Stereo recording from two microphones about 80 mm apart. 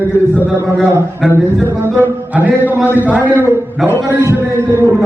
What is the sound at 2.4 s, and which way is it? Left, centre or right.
A man's voice, right.